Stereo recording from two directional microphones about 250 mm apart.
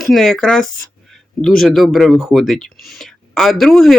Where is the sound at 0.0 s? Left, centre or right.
Centre.